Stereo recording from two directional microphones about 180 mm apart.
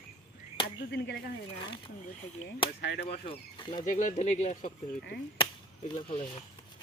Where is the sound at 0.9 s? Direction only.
70° left (ahead or behind).